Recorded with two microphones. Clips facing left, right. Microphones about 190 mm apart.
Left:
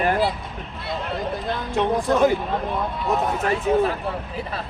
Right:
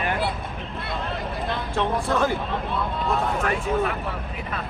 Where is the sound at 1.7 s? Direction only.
15° left (ahead or behind).